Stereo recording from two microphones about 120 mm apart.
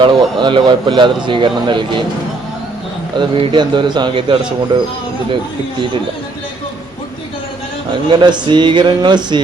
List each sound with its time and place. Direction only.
0.0 s speech: 40° right (ahead or behind)
3.2 s speech: 45° right (ahead or behind)
8.1 s speech: 40° right (ahead or behind)